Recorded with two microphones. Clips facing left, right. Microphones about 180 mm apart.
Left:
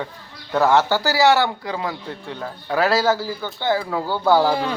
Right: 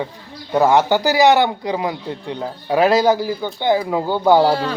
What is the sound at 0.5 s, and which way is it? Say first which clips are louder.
Speech: right 3 dB; 15° right (ahead or behind).